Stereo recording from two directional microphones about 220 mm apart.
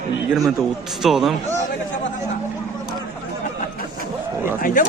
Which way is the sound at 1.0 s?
Centre (ahead or behind).